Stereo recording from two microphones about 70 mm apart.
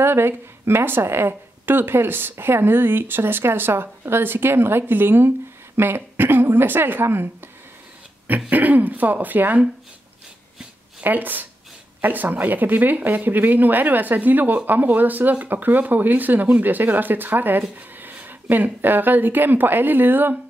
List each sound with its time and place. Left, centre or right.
0.0 s a woman's voice: right
8.5 s speech: right
11.0 s speech: right